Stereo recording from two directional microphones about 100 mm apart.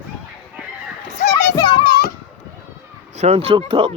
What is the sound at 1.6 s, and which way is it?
Children playing, 60° left (ahead or behind).